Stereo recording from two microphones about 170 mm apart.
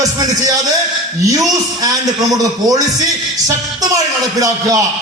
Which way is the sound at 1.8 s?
20° right (ahead or behind).